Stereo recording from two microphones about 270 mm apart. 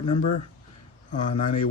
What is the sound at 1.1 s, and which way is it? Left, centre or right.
Speech, left.